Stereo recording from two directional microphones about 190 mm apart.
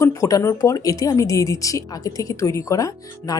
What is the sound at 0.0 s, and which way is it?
A woman's voice, 15° left (ahead or behind).